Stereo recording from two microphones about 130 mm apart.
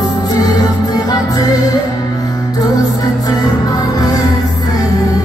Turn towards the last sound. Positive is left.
turn(degrees=30)  # may be behind; listen again after turning